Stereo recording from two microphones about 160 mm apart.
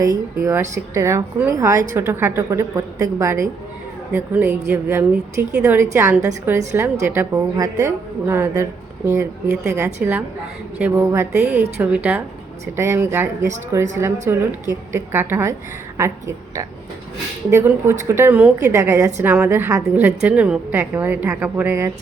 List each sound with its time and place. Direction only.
0.3 s a woman's voice: 15° right (ahead or behind)